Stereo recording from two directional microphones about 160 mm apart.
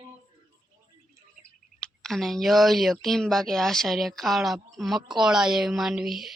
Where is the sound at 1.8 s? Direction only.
5° left (ahead or behind).